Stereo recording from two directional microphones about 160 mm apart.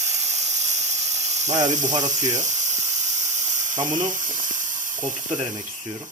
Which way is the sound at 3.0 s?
45° right (ahead or behind).